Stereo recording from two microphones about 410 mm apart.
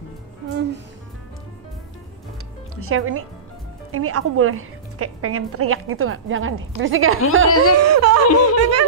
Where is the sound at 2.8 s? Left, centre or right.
Right.